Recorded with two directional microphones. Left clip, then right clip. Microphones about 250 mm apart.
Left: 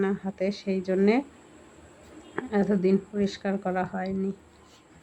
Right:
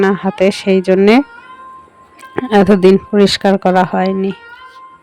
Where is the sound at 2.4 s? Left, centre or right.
Right.